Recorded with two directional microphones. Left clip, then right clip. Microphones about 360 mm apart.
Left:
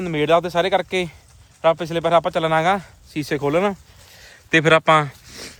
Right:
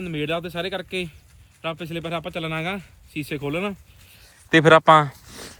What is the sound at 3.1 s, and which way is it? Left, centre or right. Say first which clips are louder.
Speech: left 8 dB; left.